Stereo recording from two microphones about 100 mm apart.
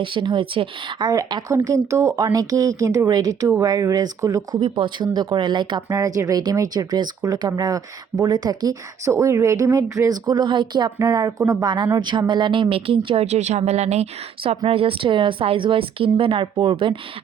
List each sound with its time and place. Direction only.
0.0 s speech: 55° right (ahead or behind); by 4.4 s 35° right (ahead or behind)
4.6 s speech: 55° right (ahead or behind)
10.9 s speech: 35° right (ahead or behind)
11.9 s speech: 50° right (ahead or behind); by 14.6 s 85° right
14.7 s speech: 65° right (ahead or behind)